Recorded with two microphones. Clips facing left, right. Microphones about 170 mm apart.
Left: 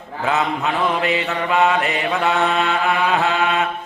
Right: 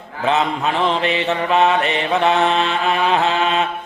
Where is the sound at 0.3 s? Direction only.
20° right (ahead or behind).